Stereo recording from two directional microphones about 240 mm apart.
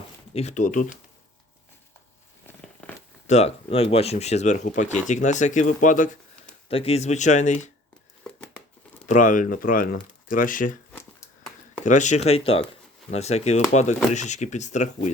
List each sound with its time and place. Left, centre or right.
0.3 s speech: left
2.8 s a sound: centre
3.2 s speech: left
9.0 s speech: left
11.9 s speech: left